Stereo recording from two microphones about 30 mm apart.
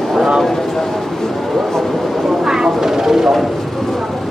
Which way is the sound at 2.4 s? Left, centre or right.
Centre.